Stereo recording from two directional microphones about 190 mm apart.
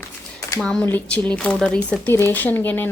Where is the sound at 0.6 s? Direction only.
5° left (ahead or behind).